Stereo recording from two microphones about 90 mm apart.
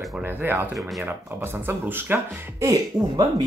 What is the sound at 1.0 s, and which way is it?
Speech, 25° right (ahead or behind).